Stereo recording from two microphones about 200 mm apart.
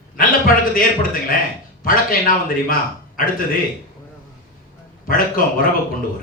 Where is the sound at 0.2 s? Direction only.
45° left (ahead or behind).